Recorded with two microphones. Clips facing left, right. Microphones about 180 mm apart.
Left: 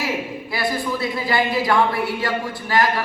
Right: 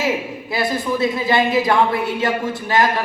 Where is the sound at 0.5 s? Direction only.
20° right (ahead or behind).